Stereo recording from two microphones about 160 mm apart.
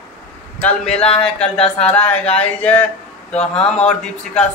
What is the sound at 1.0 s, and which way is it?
Speech, 35° left (ahead or behind).